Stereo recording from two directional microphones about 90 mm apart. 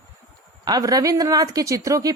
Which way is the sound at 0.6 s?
45° right (ahead or behind).